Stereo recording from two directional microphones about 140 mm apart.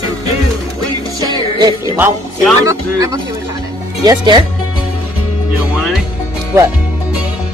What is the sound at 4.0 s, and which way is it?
Speech, 30° right (ahead or behind).